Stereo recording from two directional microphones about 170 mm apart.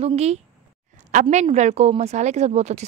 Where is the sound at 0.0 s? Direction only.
40° right (ahead or behind).